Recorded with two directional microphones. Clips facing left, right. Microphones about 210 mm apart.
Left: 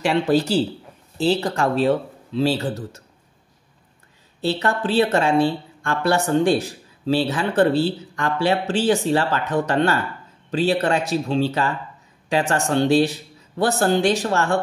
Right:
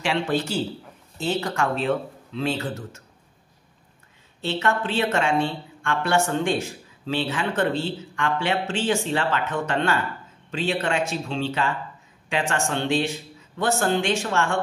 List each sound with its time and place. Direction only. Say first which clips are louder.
0.0 s speech: left 6 dB; 40° left (ahead or behind)
4.4 s speech: left 3 dB; 35° left (ahead or behind)